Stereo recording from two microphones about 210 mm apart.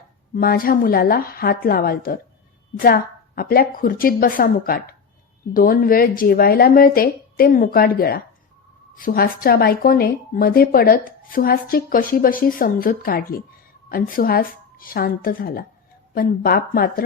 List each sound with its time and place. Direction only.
0.3 s a woman's voice: 45° left (ahead or behind)